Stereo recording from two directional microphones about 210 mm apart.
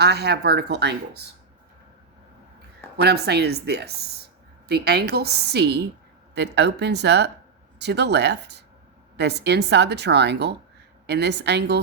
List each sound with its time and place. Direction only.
0.0 s a woman's voice: 50° right (ahead or behind)
3.0 s a woman's voice: 50° right (ahead or behind)